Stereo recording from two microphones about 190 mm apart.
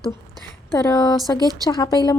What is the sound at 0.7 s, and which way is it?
Speech, 20° left (ahead or behind).